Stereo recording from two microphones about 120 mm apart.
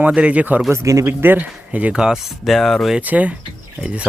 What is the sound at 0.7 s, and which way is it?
Speech, 25° right (ahead or behind).